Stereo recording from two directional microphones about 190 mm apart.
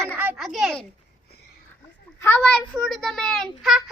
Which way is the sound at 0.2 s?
5° right (ahead or behind).